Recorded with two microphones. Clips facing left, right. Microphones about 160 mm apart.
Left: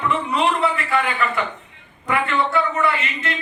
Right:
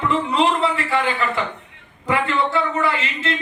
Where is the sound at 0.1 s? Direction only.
25° right (ahead or behind).